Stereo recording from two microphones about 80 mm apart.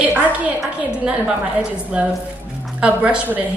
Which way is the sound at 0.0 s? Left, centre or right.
Centre.